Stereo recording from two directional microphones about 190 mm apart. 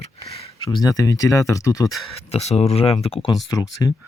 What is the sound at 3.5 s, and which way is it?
Speech, 20° left (ahead or behind).